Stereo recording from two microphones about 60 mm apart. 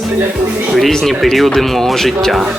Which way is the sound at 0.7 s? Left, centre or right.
Centre.